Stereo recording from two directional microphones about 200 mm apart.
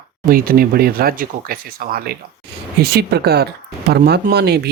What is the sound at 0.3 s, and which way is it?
Speech, 45° right (ahead or behind).